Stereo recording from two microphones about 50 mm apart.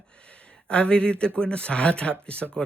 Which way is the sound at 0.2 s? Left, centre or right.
Left.